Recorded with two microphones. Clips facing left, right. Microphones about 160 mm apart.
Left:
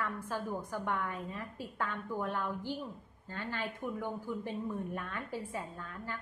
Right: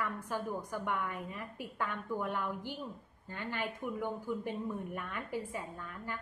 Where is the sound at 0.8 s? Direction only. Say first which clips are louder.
Left 1 dB; 15° right (ahead or behind).